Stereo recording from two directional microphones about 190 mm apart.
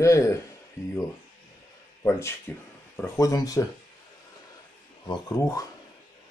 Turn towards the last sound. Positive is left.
turn(degrees=15)  # may be behind; listen again after turning